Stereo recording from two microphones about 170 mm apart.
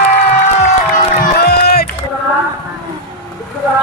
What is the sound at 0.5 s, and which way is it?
Music, 45° left (ahead or behind).